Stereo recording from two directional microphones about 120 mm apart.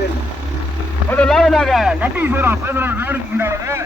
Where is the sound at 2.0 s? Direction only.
15° right (ahead or behind).